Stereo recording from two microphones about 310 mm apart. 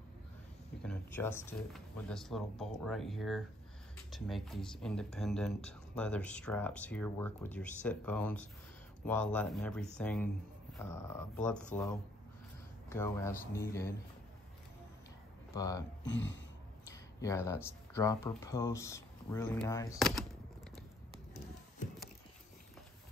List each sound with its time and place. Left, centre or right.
0.8 s speech: centre
12.9 s speech: centre
15.5 s speech: centre
16.0 s speech: left
16.8 s speech: centre